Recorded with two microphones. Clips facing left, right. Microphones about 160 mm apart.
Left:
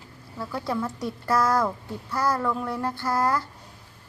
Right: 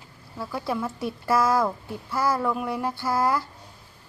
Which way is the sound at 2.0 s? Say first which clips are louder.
Right 1 dB; 5° right (ahead or behind).